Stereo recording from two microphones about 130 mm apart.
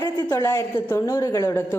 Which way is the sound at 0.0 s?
25° left (ahead or behind).